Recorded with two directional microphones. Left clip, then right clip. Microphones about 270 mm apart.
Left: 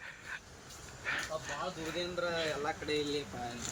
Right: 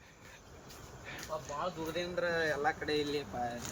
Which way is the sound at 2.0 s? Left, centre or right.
Centre.